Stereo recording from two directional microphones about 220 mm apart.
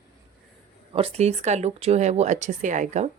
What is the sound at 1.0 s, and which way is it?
Speech, 30° right (ahead or behind).